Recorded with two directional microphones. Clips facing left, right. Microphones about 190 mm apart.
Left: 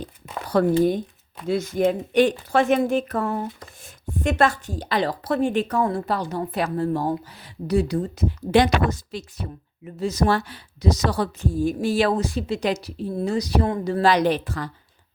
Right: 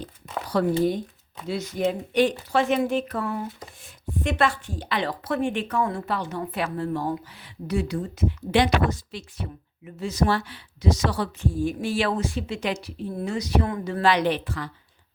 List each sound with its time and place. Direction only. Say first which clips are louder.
0.4 s a woman's voice: left 4 dB; 50° left (ahead or behind)